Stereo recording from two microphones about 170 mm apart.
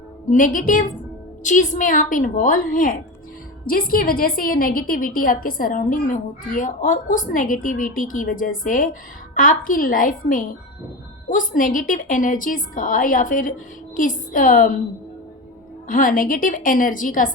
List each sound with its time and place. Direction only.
0.3 s a woman's voice: 50° left (ahead or behind)
15.9 s a woman's voice: 50° left (ahead or behind)